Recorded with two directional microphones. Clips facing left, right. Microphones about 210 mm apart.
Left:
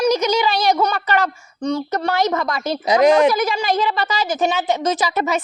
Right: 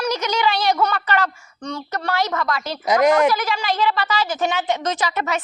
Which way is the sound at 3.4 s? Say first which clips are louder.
Left 3 dB; 45° left (ahead or behind).